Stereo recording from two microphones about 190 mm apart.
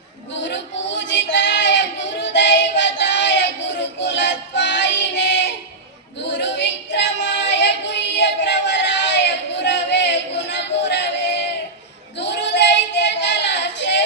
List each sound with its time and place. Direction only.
0.3 s child singing: 70° left (ahead or behind)
6.2 s female singing: 70° left (ahead or behind)
12.2 s child singing: 65° left (ahead or behind)